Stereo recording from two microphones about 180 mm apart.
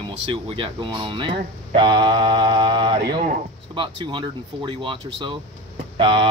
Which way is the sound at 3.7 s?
30° right (ahead or behind).